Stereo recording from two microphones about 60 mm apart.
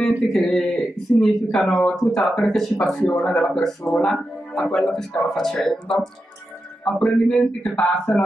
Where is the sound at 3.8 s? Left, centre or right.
Centre.